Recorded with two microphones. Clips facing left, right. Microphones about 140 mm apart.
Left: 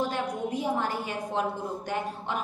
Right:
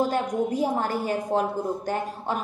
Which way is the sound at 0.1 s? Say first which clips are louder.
Right 5 dB; 40° right (ahead or behind).